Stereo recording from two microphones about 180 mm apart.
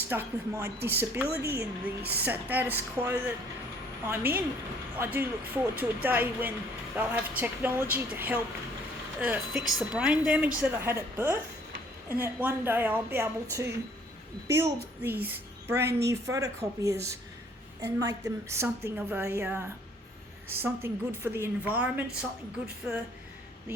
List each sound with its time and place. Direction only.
0.1 s a woman's voice: 15° right (ahead or behind)